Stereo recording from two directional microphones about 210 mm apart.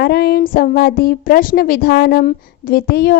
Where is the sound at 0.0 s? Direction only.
50° left (ahead or behind).